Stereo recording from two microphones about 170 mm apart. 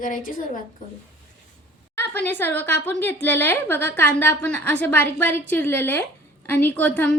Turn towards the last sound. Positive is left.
turn(degrees=10)  # may be behind; listen again after turning